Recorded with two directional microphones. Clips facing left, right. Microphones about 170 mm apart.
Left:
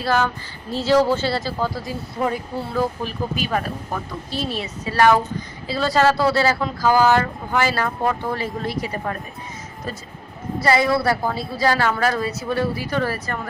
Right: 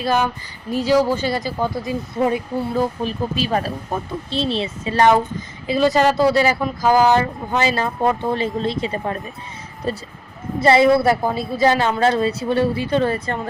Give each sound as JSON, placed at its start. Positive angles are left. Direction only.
{"t": 0.0, "sound": "speech", "side_deg": -20}
{"t": 3.4, "sound": "speech", "side_deg": -30}